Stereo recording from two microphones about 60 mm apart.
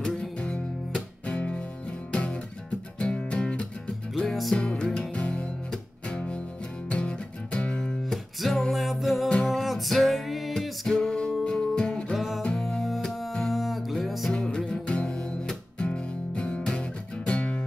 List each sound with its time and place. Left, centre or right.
0.0 s music: centre
4.2 s music: centre
4.6 s music: centre
8.0 s music: centre
12.2 s music: centre
14.3 s music: centre